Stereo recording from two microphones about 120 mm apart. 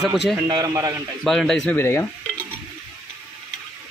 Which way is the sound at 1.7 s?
20° left (ahead or behind).